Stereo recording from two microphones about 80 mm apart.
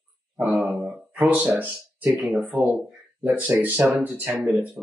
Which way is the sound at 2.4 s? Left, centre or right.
Centre.